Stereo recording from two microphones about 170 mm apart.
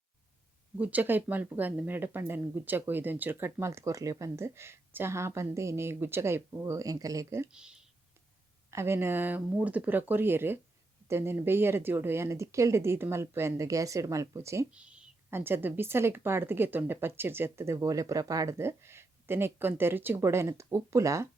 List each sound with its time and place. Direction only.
0.8 s speech: 10° right (ahead or behind)
7.5 s speech: 5° right (ahead or behind)
8.7 s speech: 15° right (ahead or behind)
14.7 s speech: 5° right (ahead or behind)